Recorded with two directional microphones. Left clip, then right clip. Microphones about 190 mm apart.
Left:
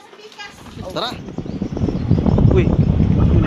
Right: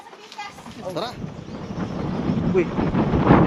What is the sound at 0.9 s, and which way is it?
Speech, centre (ahead or behind).